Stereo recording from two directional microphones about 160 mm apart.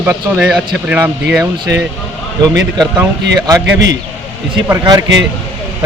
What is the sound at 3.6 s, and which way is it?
Speech, 90° right.